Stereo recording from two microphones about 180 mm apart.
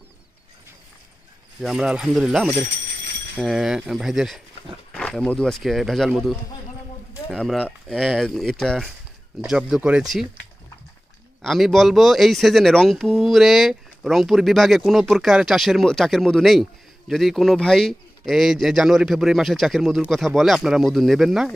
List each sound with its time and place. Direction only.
1.6 s speech: 5° right (ahead or behind)
11.4 s speech: centre (ahead or behind)